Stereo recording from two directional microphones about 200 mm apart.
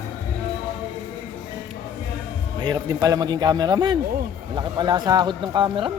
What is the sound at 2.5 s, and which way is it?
Speech, 20° right (ahead or behind).